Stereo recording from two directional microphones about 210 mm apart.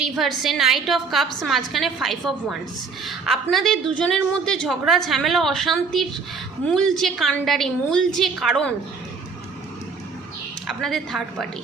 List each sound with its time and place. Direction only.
0.0 s a woman's voice: centre (ahead or behind)
10.7 s a woman's voice: centre (ahead or behind)